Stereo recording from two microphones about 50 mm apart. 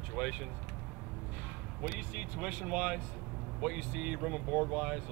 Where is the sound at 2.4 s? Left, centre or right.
Centre.